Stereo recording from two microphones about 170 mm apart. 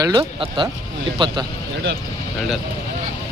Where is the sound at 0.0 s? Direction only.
30° right (ahead or behind).